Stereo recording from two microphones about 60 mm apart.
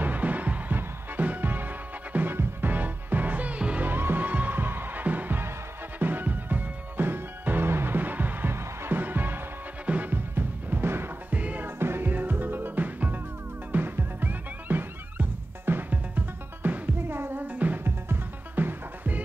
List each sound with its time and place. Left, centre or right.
0.0 s music: right
3.8 s music: right
11.3 s music: right
11.8 s music: right
17.8 s music: right